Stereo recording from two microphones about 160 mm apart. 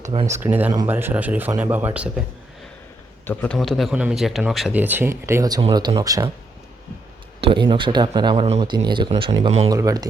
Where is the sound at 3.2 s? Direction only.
10° left (ahead or behind); by 6.2 s 20° right (ahead or behind).